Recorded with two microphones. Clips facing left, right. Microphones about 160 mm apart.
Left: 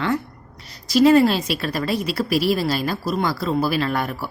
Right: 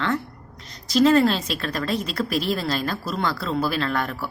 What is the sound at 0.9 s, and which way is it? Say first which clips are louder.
Speech: left 3 dB; 10° left (ahead or behind).